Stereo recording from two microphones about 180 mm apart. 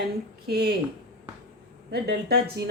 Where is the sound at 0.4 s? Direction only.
60° right (ahead or behind).